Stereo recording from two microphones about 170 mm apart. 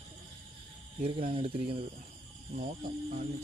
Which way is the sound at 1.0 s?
50° right (ahead or behind).